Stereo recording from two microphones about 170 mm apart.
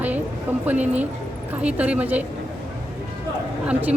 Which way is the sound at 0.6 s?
10° right (ahead or behind).